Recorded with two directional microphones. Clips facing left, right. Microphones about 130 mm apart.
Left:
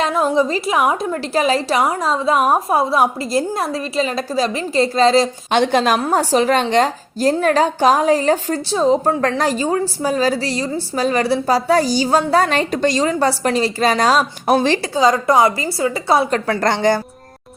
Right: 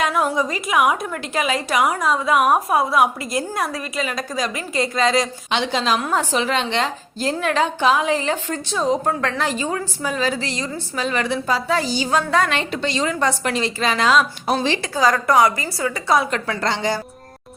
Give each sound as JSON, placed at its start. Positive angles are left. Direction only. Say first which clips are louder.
{"t": 0.0, "sound": "a woman's voice", "louder": "left 4 dB", "side_deg": 25}
{"t": 5.5, "sound": "a woman's voice", "louder": "left 6 dB", "side_deg": 50}
{"t": 6.0, "sound": "a woman's voice", "louder": "left 5 dB", "side_deg": 35}
{"t": 14.4, "sound": "a woman's voice", "louder": "left 5 dB", "side_deg": 55}
{"t": 14.9, "sound": "a woman's voice", "louder": "left 2 dB", "side_deg": 25}
{"t": 16.6, "sound": "a woman's voice", "louder": "left 6 dB", "side_deg": 55}